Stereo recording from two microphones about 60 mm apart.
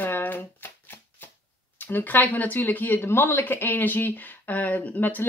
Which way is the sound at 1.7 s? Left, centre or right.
Left.